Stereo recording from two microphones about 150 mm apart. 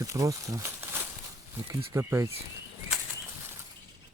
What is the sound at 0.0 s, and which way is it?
Speech, 20° right (ahead or behind).